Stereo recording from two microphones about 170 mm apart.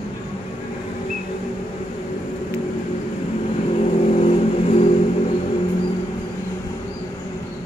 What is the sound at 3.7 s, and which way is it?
Vehicle, 40° left (ahead or behind).